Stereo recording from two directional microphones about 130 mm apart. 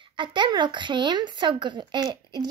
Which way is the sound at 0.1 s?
35° right (ahead or behind).